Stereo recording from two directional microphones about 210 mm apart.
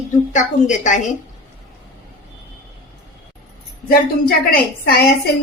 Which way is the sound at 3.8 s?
45° left (ahead or behind).